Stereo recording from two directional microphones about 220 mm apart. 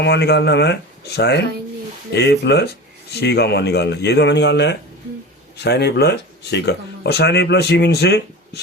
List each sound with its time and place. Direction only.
0.0 s speech: 50° left (ahead or behind)